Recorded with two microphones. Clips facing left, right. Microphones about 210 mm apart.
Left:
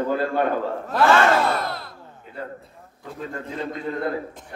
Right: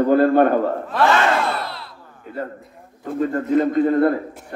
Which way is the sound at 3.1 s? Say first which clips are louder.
Right 12 dB; 50° right (ahead or behind).